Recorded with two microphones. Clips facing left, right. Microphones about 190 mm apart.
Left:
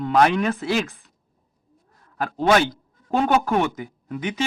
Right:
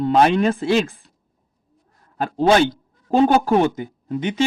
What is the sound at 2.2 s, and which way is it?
Speech, 30° right (ahead or behind).